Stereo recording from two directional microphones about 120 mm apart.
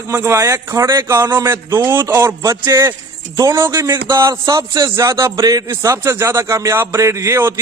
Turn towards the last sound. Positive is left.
turn(degrees=-20)  # may be behind; listen again after turning